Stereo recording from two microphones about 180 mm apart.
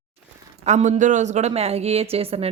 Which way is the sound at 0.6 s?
40° right (ahead or behind).